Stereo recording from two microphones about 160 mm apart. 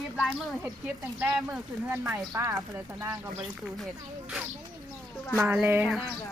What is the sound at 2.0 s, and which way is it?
Speech, 20° right (ahead or behind).